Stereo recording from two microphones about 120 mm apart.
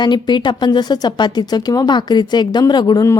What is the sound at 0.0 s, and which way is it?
A woman's voice, 40° left (ahead or behind).